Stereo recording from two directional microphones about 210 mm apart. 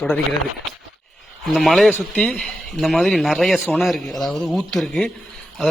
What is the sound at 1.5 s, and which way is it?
Speech, centre (ahead or behind).